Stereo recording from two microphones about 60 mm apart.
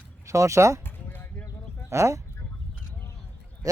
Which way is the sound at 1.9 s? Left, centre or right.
Right.